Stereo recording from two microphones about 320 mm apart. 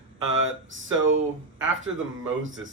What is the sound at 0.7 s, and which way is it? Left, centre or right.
Speech, right.